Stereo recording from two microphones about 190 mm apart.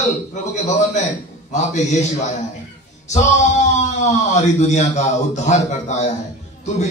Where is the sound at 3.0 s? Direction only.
40° left (ahead or behind).